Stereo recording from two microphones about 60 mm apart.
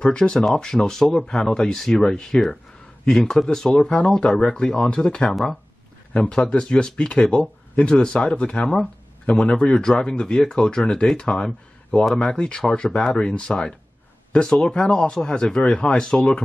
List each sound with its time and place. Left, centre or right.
0.0 s speech: centre
5.3 s speech: centre
6.1 s speech: centre